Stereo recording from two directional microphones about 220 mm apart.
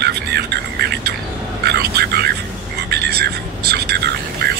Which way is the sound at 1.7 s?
45° right (ahead or behind).